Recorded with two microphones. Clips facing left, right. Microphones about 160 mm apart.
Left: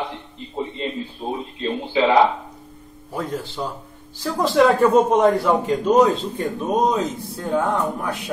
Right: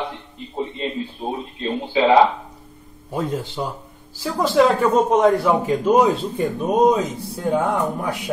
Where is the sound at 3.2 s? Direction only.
20° right (ahead or behind).